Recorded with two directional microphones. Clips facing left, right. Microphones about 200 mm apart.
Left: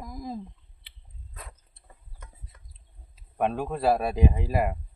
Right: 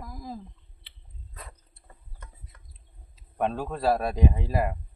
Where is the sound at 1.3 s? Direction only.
Centre (ahead or behind).